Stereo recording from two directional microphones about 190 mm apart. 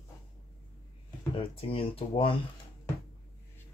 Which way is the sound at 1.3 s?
30° left (ahead or behind).